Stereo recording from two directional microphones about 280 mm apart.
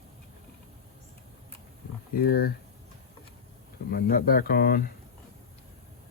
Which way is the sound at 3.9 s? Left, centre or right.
Left.